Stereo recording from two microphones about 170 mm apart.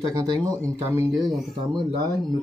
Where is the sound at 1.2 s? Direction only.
Centre (ahead or behind).